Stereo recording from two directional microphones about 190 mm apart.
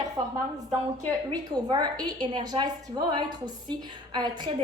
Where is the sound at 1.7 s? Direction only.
25° right (ahead or behind).